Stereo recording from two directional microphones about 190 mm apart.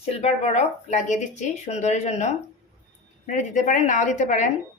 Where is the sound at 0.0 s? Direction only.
35° left (ahead or behind).